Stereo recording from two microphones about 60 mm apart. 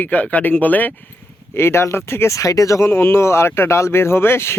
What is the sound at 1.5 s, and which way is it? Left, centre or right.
Speech, left.